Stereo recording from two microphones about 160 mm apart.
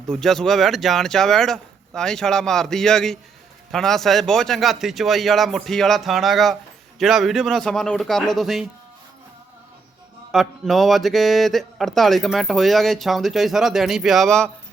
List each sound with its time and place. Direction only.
0.1 s speech: centre (ahead or behind)
10.3 s speech: centre (ahead or behind)